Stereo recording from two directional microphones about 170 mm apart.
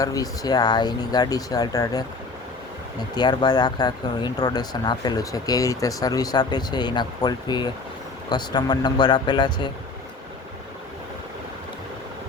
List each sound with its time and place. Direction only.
0.0 s speech: 20° left (ahead or behind)
3.2 s speech: 25° left (ahead or behind)